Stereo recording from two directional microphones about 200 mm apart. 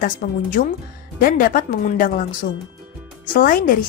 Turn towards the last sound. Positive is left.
turn(degrees=45)  # may be behind; listen again after turning